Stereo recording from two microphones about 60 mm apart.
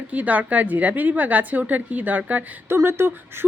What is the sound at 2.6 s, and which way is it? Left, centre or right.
Speech, right.